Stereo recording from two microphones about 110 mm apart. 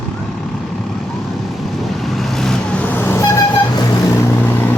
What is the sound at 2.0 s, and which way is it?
Vehicle, centre (ahead or behind).